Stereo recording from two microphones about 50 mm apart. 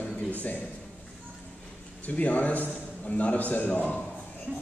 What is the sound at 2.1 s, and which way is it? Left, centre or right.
A man's voice, left.